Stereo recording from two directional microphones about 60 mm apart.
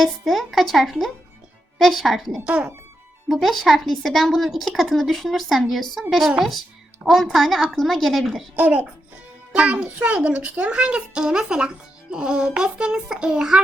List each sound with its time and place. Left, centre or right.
0.0 s speech: centre
8.5 s a child's voice: right; by 13.6 s centre